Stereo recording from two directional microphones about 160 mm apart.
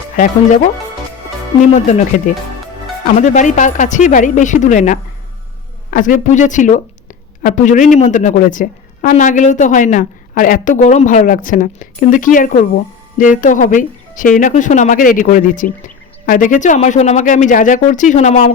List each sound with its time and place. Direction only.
0.2 s a woman's voice: 50° left (ahead or behind)
1.7 s a woman's voice: 45° left (ahead or behind)